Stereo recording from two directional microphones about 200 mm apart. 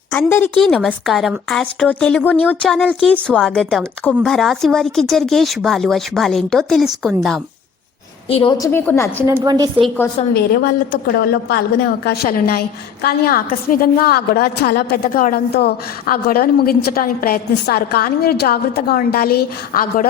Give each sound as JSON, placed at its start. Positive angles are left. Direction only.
{"t": 0.1, "sound": "a woman's voice", "side_deg": 10}
{"t": 8.3, "sound": "a woman's voice", "side_deg": 25}
{"t": 9.2, "sound": "a woman's voice", "side_deg": -15}
{"t": 10.3, "sound": "a woman's voice", "side_deg": 55}